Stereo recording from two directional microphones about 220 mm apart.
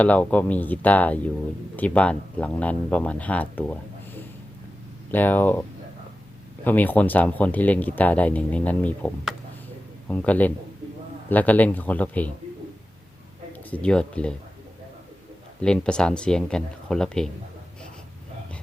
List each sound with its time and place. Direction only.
0.0 s speech: 5° left (ahead or behind)
5.1 s speech: 10° left (ahead or behind)
6.7 s speech: 10° left (ahead or behind)
13.5 s speech: 5° left (ahead or behind)
15.6 s speech: 5° left (ahead or behind)